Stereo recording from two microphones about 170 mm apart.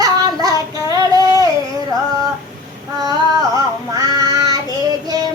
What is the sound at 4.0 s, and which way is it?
Child singing, 20° right (ahead or behind).